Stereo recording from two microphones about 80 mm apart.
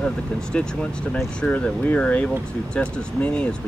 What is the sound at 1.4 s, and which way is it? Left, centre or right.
Speech, centre.